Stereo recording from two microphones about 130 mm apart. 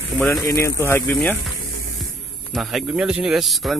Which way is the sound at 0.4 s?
25° left (ahead or behind).